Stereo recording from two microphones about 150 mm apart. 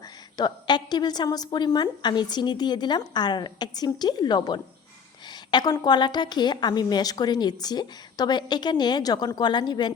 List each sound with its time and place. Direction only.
0.3 s a woman's voice: 30° left (ahead or behind)
5.3 s a sound: 30° left (ahead or behind)
5.8 s a woman's voice: 30° left (ahead or behind)